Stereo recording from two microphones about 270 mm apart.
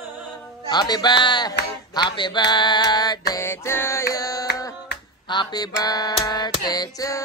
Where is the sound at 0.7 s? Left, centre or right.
Centre.